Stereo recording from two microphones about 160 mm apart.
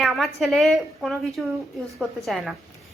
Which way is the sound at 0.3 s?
Centre (ahead or behind).